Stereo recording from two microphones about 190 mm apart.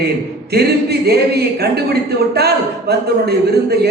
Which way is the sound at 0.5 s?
55° right (ahead or behind).